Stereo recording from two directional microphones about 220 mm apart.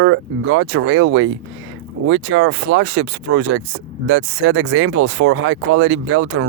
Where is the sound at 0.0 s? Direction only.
65° right (ahead or behind).